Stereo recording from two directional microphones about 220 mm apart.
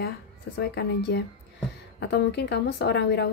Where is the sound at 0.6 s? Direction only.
50° left (ahead or behind).